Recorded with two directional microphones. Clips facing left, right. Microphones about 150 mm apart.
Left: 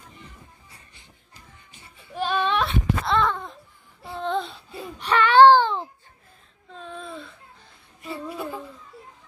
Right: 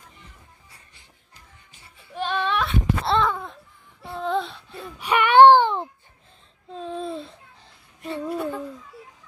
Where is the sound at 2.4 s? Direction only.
25° left (ahead or behind).